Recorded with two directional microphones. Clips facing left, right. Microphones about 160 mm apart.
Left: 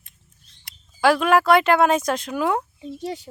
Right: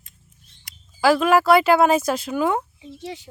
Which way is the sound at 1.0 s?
Centre (ahead or behind).